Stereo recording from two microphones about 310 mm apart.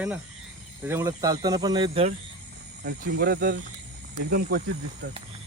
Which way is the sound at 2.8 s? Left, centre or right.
Right.